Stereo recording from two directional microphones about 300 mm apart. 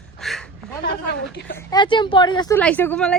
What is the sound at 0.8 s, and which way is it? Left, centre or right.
Speech, left.